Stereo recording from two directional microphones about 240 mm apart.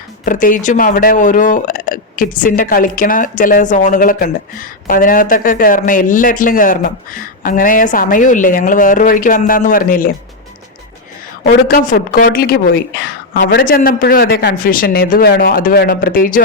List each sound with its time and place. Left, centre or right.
0.3 s speech: left
11.4 s speech: left